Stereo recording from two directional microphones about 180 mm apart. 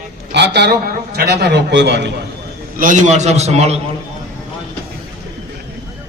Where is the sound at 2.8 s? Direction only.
45° right (ahead or behind).